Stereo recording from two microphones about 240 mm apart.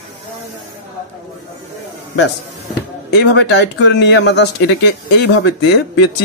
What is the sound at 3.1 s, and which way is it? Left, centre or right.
Speech, left.